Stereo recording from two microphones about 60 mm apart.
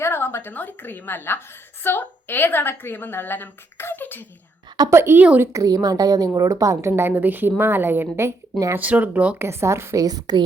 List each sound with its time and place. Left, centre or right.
0.0 s a sound: left
0.5 s a woman's voice: left
4.9 s speech: right
5.5 s a woman's voice: right
6.9 s a woman's voice: right
8.8 s speech: right
9.4 s speech: right
10.0 s a woman's voice: right